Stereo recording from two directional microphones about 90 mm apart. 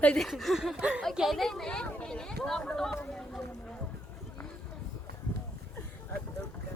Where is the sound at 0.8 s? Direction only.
15° right (ahead or behind).